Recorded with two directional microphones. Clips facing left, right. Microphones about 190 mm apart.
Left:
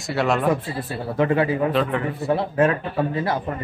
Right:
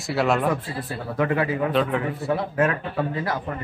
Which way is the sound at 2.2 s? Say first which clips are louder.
Left 5 dB; 30° left (ahead or behind).